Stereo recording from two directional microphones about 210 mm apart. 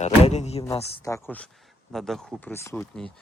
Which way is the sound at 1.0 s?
10° left (ahead or behind).